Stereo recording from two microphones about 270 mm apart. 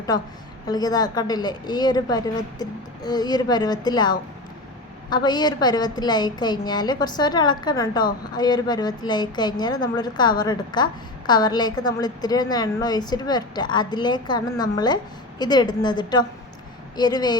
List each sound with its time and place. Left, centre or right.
0.1 s a woman's voice: centre